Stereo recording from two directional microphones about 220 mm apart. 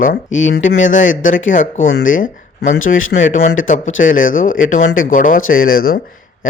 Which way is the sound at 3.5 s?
35° left (ahead or behind).